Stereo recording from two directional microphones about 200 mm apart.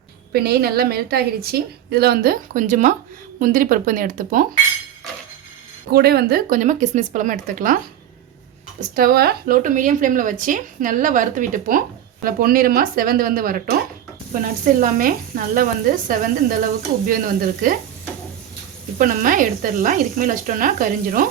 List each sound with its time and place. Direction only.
0.3 s speech: 50° right (ahead or behind)
5.9 s speech: 50° right (ahead or behind)
9.0 s speech: 50° right (ahead or behind)
18.9 s speech: 45° right (ahead or behind)